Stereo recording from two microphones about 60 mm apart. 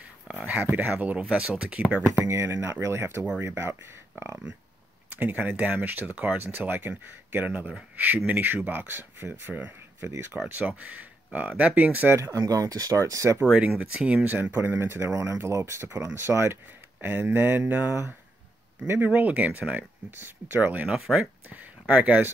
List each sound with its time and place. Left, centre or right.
0.5 s speech: right
1.2 s speech: centre
2.2 s speech: right
5.1 s speech: right
10.0 s speech: right
10.7 s speech: right
12.2 s speech: right
13.4 s speech: centre; by 17.8 s right
17.8 s speech: right
18.9 s speech: right
20.9 s speech: centre
21.5 s speech: right